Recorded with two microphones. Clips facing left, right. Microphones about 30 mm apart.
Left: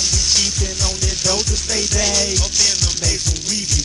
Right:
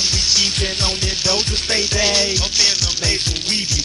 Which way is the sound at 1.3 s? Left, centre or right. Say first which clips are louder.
Right 2 dB; right.